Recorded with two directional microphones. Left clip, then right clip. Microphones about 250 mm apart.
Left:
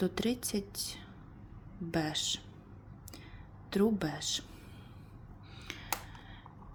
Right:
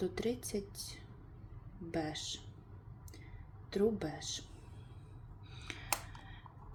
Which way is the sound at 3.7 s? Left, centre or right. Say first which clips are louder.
Left 3 dB; left.